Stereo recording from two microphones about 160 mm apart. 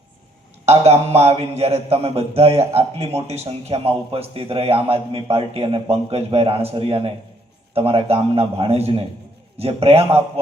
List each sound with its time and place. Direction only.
0.6 s a man's voice: 40° right (ahead or behind)